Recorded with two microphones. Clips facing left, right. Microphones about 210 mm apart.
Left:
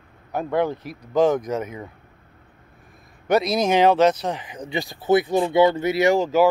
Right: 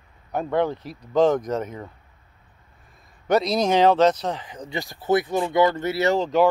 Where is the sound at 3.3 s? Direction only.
5° left (ahead or behind).